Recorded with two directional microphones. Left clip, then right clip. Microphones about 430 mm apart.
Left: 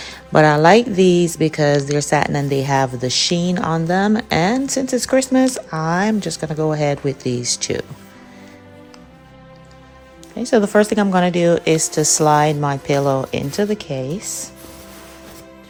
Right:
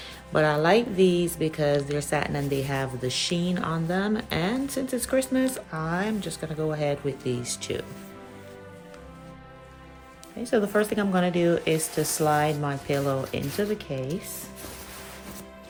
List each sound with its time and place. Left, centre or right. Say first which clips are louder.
0.0 s speech: left 10 dB; centre
10.4 s speech: left 9 dB; centre